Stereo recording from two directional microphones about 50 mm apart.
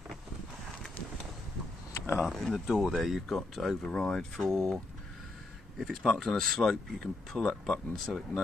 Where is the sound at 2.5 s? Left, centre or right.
Centre.